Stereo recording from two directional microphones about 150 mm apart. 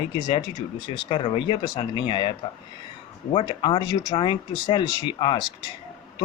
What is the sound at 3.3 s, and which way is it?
Speech, 35° left (ahead or behind).